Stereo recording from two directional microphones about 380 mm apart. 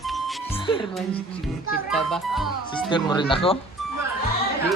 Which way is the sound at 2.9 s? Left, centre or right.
Centre.